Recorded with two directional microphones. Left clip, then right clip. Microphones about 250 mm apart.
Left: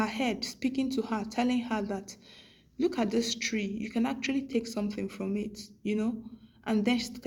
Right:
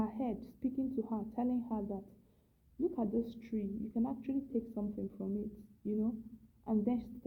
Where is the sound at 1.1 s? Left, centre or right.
Centre.